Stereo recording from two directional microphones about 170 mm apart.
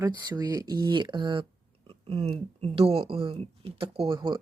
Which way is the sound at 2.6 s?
35° right (ahead or behind).